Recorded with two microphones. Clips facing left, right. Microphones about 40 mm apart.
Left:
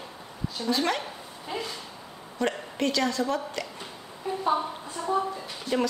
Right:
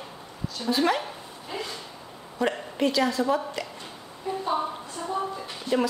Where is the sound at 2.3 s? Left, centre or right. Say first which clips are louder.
Right 2 dB; centre.